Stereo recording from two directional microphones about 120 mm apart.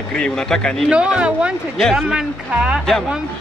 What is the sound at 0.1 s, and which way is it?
Speech, 5° left (ahead or behind).